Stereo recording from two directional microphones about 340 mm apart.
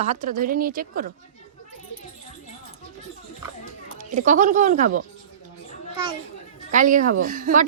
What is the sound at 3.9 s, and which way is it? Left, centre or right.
Speech, right.